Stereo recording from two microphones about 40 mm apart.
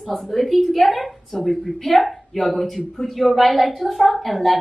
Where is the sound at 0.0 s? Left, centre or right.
Centre.